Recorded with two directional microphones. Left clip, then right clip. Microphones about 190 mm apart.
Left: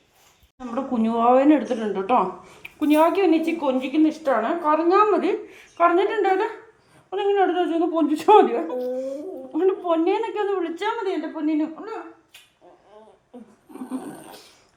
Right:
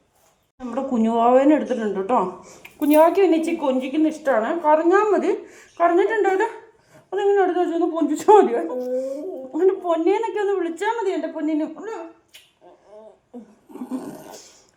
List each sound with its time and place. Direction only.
0.7 s a woman's voice: 10° right (ahead or behind)
9.6 s a woman's voice: 10° right (ahead or behind)
14.0 s a sound: 20° right (ahead or behind)